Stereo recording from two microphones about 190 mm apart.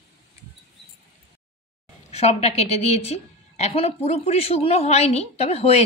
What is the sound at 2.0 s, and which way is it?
A woman's voice, 35° left (ahead or behind).